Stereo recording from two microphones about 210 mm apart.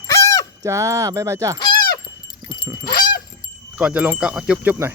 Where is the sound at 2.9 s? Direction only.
45° left (ahead or behind).